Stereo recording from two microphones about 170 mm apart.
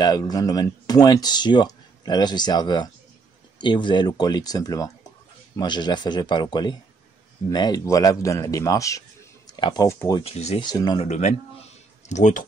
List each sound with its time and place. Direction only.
0.0 s speech: 20° left (ahead or behind)
10.2 s speech: 40° left (ahead or behind)
10.6 s speech: 25° left (ahead or behind)
11.1 s speech: 45° left (ahead or behind)